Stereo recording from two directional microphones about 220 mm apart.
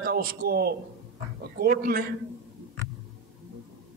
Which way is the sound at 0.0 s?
40° right (ahead or behind).